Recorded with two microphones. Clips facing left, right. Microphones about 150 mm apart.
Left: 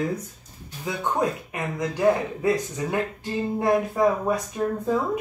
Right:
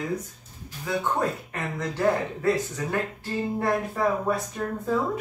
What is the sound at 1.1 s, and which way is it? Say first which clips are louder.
Speech: left 2 dB; 15° left (ahead or behind).